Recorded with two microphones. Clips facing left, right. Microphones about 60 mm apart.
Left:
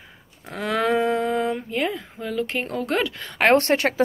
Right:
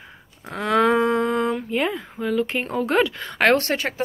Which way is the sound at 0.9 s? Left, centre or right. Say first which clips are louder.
Right 2 dB; right.